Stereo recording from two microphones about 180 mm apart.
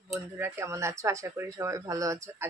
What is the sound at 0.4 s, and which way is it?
Speech, 15° right (ahead or behind).